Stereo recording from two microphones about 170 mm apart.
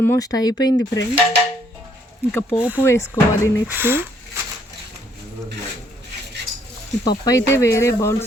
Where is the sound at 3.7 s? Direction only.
10° right (ahead or behind).